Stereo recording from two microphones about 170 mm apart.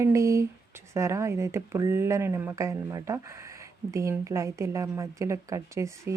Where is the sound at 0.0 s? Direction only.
20° right (ahead or behind).